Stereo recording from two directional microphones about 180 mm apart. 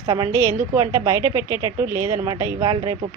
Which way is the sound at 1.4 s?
20° left (ahead or behind).